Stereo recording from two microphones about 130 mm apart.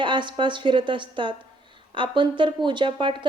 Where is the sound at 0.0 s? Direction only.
35° right (ahead or behind).